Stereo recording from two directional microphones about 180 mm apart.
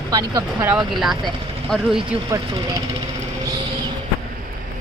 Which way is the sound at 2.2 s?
20° right (ahead or behind).